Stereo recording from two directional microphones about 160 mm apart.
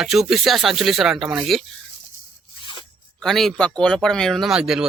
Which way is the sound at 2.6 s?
30° left (ahead or behind).